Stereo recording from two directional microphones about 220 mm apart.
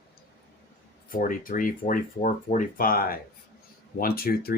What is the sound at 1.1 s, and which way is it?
Speech, 40° left (ahead or behind).